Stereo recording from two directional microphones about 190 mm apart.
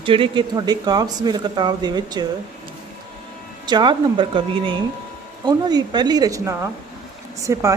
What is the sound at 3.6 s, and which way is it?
A woman's voice, 25° right (ahead or behind).